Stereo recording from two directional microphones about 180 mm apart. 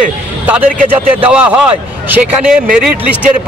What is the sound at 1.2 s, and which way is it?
Speech, 5° right (ahead or behind).